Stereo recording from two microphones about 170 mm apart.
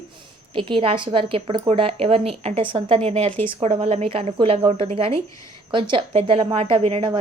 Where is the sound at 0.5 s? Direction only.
30° right (ahead or behind).